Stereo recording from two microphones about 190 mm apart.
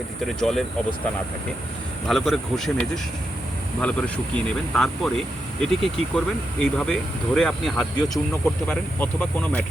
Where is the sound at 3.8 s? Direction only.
5° left (ahead or behind).